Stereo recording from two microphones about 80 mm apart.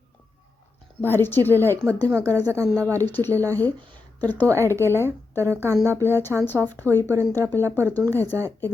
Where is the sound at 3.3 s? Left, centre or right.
Right.